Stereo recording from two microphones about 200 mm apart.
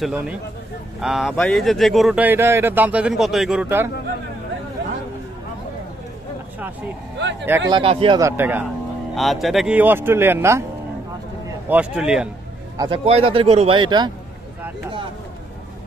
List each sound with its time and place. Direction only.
0.0 s speech: 5° right (ahead or behind)
7.4 s speech: 10° right (ahead or behind)
7.7 s speech: 25° right (ahead or behind)
8.2 s speech: 10° right (ahead or behind)
9.1 s speech: centre (ahead or behind)
11.7 s speech: 5° right (ahead or behind)
12.7 s speech: 20° right (ahead or behind)